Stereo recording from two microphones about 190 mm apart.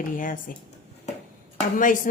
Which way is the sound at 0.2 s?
45° left (ahead or behind).